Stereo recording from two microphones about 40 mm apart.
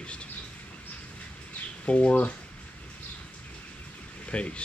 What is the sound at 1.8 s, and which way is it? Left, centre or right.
Speech, left.